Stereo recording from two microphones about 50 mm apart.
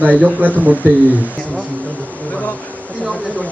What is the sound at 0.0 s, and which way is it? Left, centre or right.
Speech, right.